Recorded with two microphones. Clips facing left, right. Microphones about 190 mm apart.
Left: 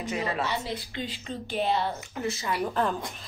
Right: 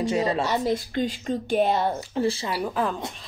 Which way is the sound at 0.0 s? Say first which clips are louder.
Right 6 dB; 30° right (ahead or behind).